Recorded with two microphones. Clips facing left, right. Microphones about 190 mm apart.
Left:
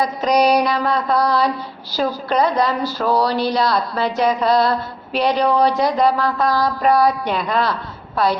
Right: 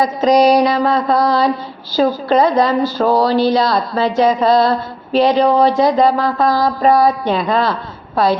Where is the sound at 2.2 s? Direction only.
90° right.